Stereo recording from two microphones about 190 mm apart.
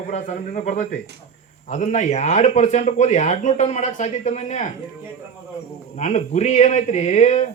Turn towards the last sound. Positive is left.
turn(degrees=40)  # may be behind; listen again after turning